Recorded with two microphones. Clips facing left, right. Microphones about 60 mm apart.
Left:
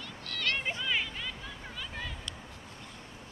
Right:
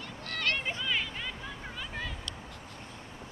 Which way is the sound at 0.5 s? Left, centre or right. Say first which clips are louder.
Even; centre.